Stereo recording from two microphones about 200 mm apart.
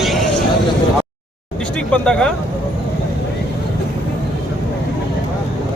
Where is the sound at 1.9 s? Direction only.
5° left (ahead or behind).